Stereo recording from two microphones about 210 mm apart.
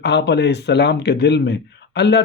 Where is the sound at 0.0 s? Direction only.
55° left (ahead or behind).